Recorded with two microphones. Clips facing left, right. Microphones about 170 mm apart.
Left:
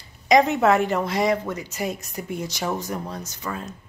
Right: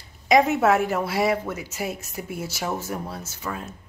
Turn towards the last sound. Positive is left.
turn(degrees=-5)  # may be behind; listen again after turning